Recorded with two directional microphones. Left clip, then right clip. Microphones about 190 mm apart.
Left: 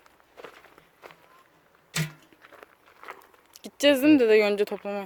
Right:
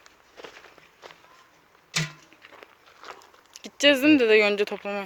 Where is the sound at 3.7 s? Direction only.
20° left (ahead or behind).